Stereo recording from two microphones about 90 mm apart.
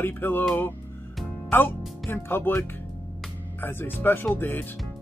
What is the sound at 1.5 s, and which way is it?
Speech, 25° left (ahead or behind).